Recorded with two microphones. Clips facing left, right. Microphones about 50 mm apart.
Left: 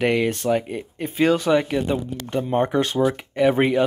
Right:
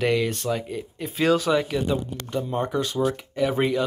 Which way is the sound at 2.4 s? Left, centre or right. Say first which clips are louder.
Left 5 dB; left.